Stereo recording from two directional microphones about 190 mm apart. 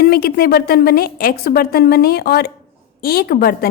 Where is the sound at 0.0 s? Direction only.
55° left (ahead or behind).